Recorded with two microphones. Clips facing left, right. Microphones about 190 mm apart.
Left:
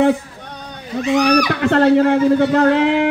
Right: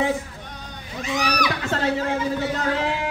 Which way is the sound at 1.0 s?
60° left (ahead or behind).